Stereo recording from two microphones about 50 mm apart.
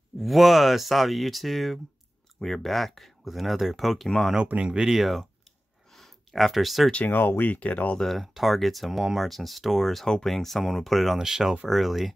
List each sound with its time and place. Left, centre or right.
0.2 s speech: centre
4.5 s speech: right
4.8 s speech: centre
5.9 s a sound: centre
6.9 s speech: left
7.2 s speech: left
7.5 s speech: left
8.0 s speech: centre
11.1 s speech: centre